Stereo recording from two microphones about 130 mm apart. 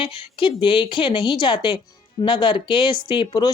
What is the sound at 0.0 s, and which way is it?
Speech, 40° left (ahead or behind).